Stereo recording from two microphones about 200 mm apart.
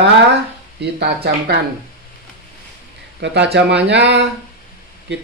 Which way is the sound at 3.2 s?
60° right (ahead or behind).